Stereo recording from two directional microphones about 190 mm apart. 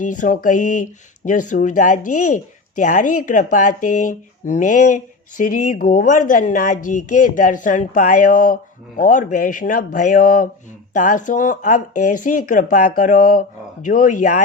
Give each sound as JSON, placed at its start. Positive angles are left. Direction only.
{"t": 0.0, "sound": "speech", "side_deg": 40}